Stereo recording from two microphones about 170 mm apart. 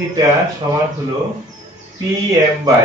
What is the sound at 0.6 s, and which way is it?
Speech, 25° right (ahead or behind).